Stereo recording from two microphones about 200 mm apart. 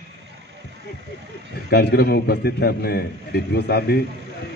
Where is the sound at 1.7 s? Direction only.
55° left (ahead or behind).